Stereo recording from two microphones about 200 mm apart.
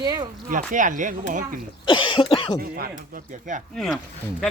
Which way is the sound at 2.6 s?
50° right (ahead or behind).